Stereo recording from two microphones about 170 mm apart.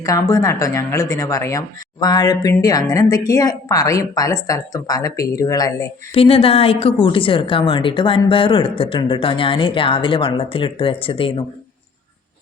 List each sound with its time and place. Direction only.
0.0 s speech: 20° left (ahead or behind)
6.1 s speech: 35° left (ahead or behind)